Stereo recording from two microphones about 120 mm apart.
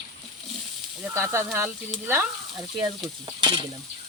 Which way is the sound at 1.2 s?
20° right (ahead or behind).